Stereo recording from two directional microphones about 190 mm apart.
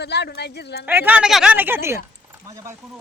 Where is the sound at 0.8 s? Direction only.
10° right (ahead or behind).